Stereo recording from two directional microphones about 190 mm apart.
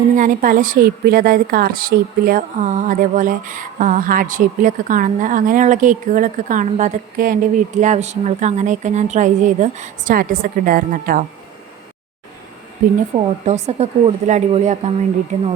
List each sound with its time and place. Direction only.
0.2 s speech: 45° right (ahead or behind)
13.1 s speech: 35° right (ahead or behind)